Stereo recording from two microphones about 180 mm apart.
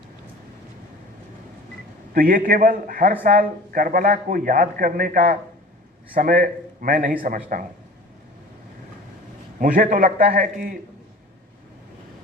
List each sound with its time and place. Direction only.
2.1 s a man's voice: 50° right (ahead or behind)
9.6 s a man's voice: 50° right (ahead or behind)